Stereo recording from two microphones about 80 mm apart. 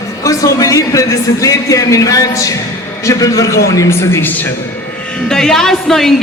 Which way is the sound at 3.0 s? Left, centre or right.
Left.